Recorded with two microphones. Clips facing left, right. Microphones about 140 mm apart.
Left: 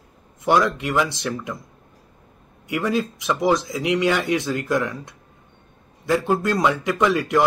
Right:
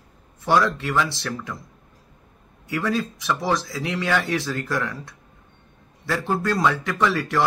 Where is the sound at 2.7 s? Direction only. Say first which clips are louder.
Left 2 dB; 20° left (ahead or behind).